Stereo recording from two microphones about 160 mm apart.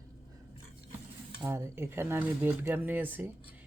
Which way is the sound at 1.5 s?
15° right (ahead or behind).